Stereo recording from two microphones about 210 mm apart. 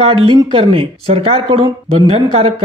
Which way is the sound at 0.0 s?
25° right (ahead or behind).